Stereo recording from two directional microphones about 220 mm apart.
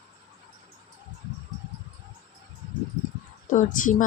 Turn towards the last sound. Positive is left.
turn(degrees=35)  # may be behind; listen again after turning